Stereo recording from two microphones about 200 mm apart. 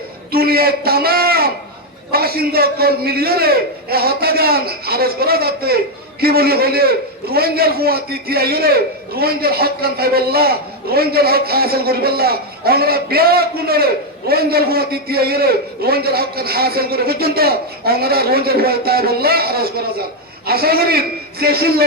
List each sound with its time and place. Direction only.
0.3 s a man's voice: 50° right (ahead or behind)